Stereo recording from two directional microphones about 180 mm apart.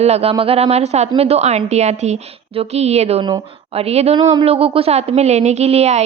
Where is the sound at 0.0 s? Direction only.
35° right (ahead or behind).